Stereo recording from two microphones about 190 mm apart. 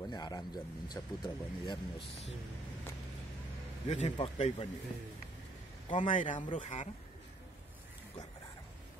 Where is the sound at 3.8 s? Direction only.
35° left (ahead or behind).